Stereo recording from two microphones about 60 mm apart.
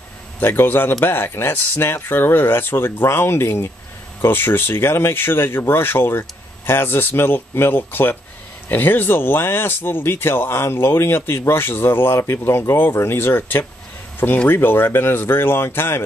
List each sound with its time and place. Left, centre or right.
0.4 s speech: left